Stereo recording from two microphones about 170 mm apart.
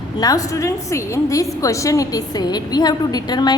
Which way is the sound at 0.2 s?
20° left (ahead or behind).